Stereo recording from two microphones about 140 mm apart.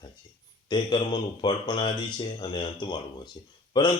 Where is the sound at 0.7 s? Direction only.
35° left (ahead or behind).